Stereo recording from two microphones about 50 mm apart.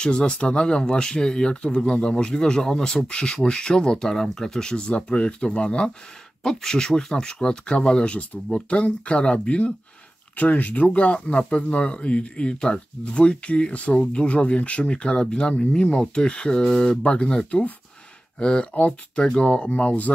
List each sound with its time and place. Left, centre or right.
0.0 s speech: left